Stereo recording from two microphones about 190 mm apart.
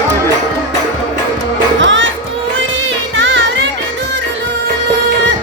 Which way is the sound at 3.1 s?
65° right (ahead or behind).